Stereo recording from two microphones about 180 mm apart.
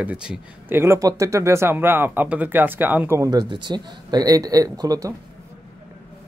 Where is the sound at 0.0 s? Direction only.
5° right (ahead or behind).